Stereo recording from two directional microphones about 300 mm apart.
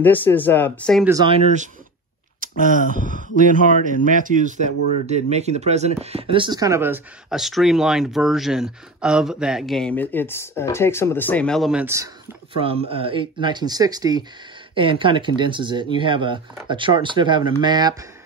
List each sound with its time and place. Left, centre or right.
0.0 s speech: centre
1.0 s speech: centre
12.5 s speech: centre